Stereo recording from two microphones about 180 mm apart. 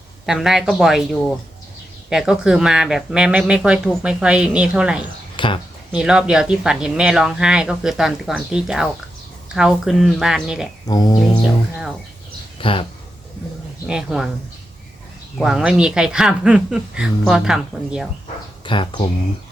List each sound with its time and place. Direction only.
0.3 s speech: centre (ahead or behind)
5.4 s a sound: 25° left (ahead or behind)
5.9 s speech: 5° right (ahead or behind)
10.8 s speech: 20° left (ahead or behind)
12.5 s a sound: 30° left (ahead or behind)
13.8 s speech: 5° right (ahead or behind)
15.4 s speech: centre (ahead or behind)
18.6 s speech: 25° left (ahead or behind)